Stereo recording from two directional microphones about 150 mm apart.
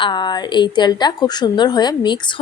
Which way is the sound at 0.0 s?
30° left (ahead or behind).